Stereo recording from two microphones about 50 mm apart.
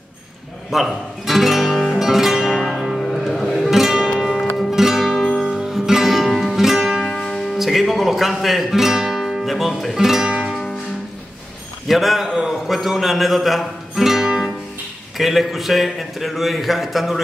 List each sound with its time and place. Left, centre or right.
0.7 s speech: centre
2.0 s music: centre
4.1 s music: centre
4.6 s music: centre
7.2 s music: centre
7.5 s music: centre
11.9 s speech: centre